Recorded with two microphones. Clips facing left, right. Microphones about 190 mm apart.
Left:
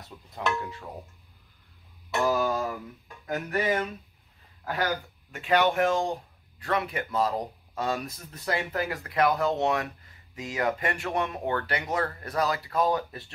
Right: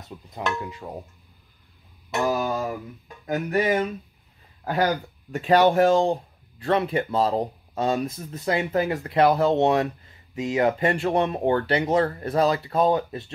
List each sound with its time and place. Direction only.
0.6 s speech: 20° right (ahead or behind)
2.0 s a sound: 20° right (ahead or behind)
3.3 s speech: 20° right (ahead or behind)
4.6 s speech: 40° right (ahead or behind)
6.6 s speech: 25° right (ahead or behind)